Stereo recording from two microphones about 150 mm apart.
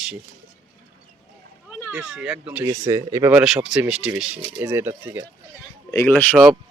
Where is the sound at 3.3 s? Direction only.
5° right (ahead or behind).